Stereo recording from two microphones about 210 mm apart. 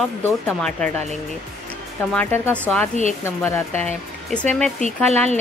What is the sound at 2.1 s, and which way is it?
Speech, 10° left (ahead or behind).